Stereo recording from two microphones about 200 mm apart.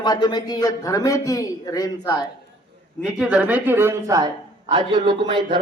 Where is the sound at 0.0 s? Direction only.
20° left (ahead or behind).